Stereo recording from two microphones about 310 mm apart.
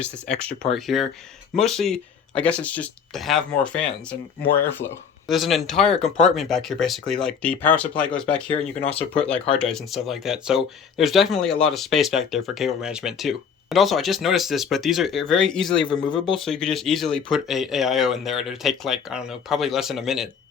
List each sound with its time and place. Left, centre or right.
0.0 s speech: centre
15.8 s speech: centre
16.1 s speech: centre